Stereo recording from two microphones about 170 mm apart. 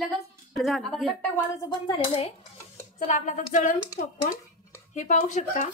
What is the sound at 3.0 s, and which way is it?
Speech, 45° left (ahead or behind).